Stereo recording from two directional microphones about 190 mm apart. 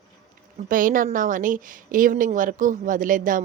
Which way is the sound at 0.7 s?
45° right (ahead or behind).